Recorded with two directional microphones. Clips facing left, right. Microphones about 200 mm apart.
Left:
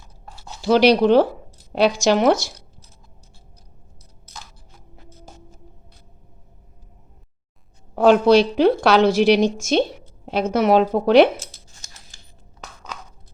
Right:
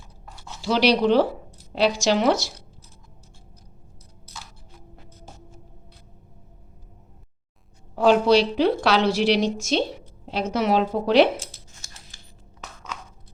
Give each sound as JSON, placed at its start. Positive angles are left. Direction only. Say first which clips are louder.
{"t": 0.6, "sound": "a woman's voice", "louder": "left 5 dB", "side_deg": 50}
{"t": 7.9, "sound": "a woman's voice", "louder": "left 4 dB", "side_deg": 50}